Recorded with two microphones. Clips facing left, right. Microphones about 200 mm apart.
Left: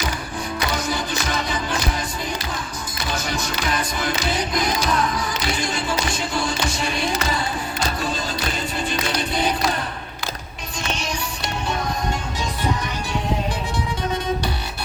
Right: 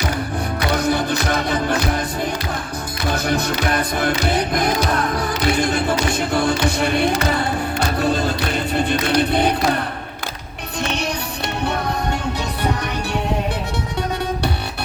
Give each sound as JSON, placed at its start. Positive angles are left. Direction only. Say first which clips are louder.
{"t": 0.7, "sound": "music", "louder": "right 10 dB", "side_deg": -60}
{"t": 3.1, "sound": "music", "louder": "right 7 dB", "side_deg": -60}